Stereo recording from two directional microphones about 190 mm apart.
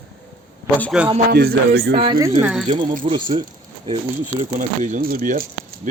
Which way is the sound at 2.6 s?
25° right (ahead or behind).